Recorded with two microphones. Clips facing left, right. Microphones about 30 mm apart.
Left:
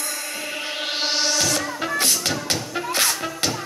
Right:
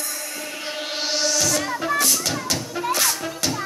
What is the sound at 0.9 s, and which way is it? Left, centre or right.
Music, left.